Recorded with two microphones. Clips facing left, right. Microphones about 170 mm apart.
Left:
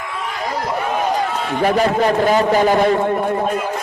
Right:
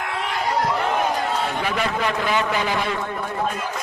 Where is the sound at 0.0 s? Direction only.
75° right (ahead or behind).